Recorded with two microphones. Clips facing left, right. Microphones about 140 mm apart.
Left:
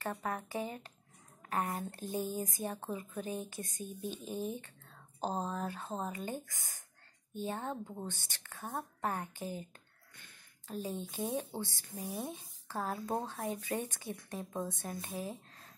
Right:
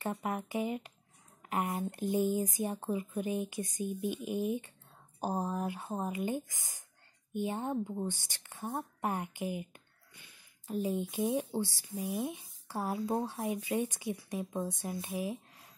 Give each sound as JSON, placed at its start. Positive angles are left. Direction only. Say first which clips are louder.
{"t": 0.0, "sound": "speech", "louder": "right 3 dB", "side_deg": -15}